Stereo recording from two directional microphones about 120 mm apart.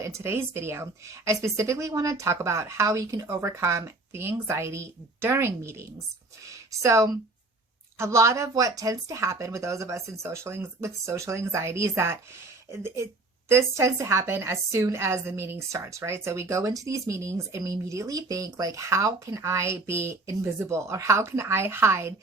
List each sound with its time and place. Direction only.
0.0 s a woman's voice: 20° right (ahead or behind)
13.5 s a woman's voice: 25° right (ahead or behind)